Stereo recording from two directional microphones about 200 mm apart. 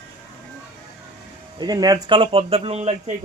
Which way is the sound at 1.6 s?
20° right (ahead or behind).